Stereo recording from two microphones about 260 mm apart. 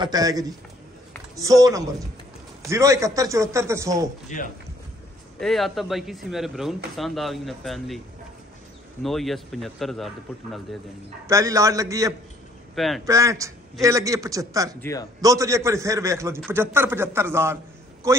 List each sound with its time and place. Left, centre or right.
0.0 s a man's voice: centre
5.4 s a man's voice: centre
9.0 s a man's voice: centre
11.2 s a man's voice: centre
12.7 s speech: centre
13.0 s a man's voice: centre
14.8 s a man's voice: centre
15.2 s a man's voice: centre